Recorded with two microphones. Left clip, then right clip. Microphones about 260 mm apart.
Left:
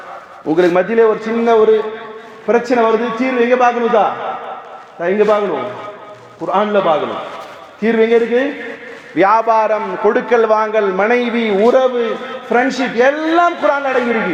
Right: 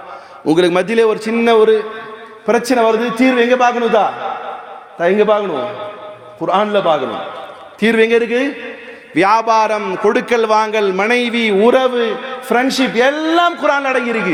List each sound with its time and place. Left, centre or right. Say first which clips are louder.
0.4 s a man's voice: even; right
2.5 s a man's voice: even; right
6.4 s a man's voice: even; right